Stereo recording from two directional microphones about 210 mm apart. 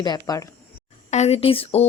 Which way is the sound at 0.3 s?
20° left (ahead or behind).